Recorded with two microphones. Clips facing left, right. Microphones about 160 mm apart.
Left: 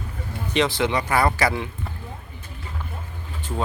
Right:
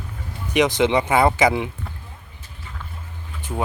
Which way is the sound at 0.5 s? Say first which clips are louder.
Right 4 dB; 15° right (ahead or behind).